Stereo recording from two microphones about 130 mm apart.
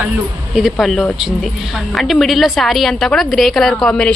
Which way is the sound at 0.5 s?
Centre (ahead or behind).